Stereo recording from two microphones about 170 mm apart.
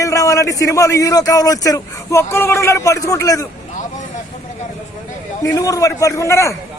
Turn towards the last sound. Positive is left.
turn(degrees=15)  # may be behind; listen again after turning